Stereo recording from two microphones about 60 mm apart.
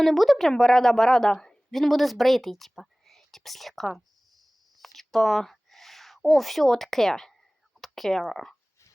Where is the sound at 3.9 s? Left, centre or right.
Centre.